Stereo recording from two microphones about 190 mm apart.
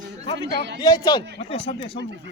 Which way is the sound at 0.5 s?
65° right (ahead or behind).